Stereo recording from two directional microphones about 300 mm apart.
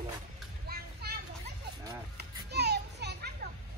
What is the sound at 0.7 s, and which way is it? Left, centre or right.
Children playing, right.